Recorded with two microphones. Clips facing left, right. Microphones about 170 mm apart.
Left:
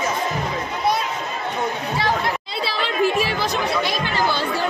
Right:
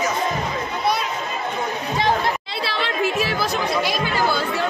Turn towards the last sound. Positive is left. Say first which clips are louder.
# left 1 dB
turn(degrees=-5)  # may be behind; listen again after turning